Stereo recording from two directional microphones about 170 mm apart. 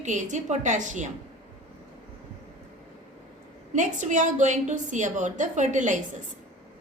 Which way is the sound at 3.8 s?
45° right (ahead or behind).